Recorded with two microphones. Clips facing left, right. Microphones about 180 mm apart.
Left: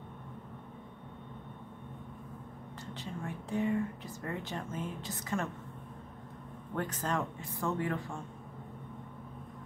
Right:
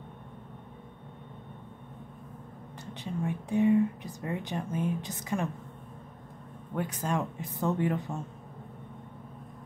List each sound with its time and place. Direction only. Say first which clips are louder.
2.9 s speech: right 7 dB; 15° right (ahead or behind)
6.7 s speech: right 3 dB; 10° right (ahead or behind)